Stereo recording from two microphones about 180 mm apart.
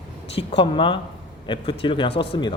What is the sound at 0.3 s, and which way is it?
Speech, 30° left (ahead or behind).